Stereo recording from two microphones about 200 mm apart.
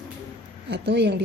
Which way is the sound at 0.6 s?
55° right (ahead or behind).